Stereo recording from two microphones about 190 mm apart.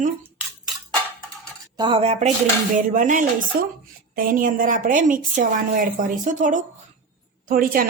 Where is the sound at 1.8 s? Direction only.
25° right (ahead or behind).